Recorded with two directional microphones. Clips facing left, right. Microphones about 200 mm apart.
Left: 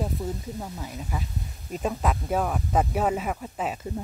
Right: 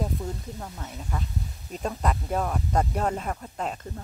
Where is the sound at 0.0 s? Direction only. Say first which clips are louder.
Left 1 dB; 5° left (ahead or behind).